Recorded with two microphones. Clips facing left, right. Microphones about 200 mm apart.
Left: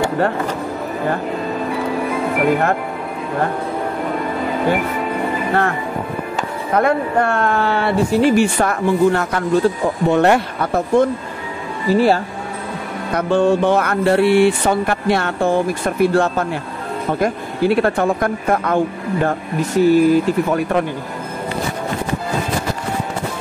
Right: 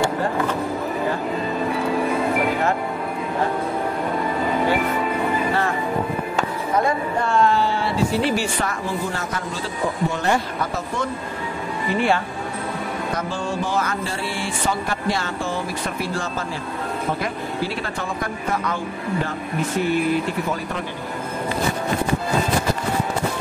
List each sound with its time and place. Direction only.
6.7 s speech: 65° left (ahead or behind)
11.9 s speech: 35° left (ahead or behind)
13.1 s speech: 60° left (ahead or behind)
19.8 s speech: 40° left (ahead or behind)